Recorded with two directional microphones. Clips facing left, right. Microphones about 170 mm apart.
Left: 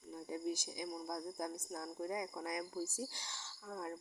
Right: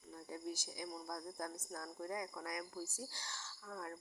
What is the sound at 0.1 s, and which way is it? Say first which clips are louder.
Speech: left 5 dB; 15° left (ahead or behind).